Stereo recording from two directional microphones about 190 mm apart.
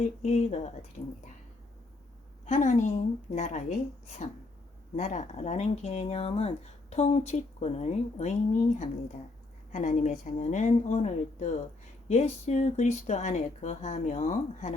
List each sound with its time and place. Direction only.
0.0 s speech: 35° left (ahead or behind)
2.5 s speech: 40° left (ahead or behind)
4.9 s speech: 40° left (ahead or behind)